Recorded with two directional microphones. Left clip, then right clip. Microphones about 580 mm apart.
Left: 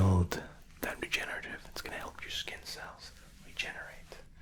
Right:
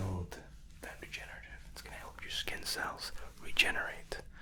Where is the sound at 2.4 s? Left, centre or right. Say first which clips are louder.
Right 4 dB; centre.